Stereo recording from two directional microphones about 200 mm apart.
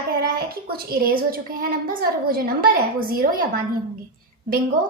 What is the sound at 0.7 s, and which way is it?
A woman's voice, 45° right (ahead or behind).